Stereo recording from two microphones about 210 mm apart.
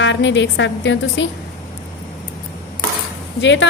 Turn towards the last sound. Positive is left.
turn(degrees=60)  # may be behind; listen again after turning